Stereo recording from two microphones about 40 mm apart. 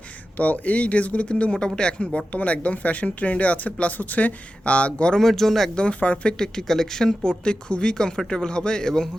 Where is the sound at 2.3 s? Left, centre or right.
Left.